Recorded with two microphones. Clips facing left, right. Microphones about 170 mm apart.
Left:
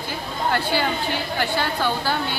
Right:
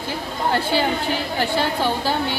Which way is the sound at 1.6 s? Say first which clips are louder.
Right 2 dB; 25° right (ahead or behind).